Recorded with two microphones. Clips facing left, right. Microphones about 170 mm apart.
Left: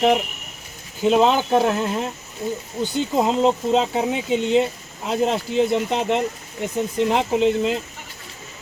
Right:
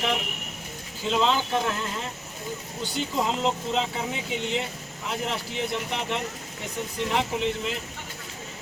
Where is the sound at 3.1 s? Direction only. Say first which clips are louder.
Left 8 dB; 55° left (ahead or behind).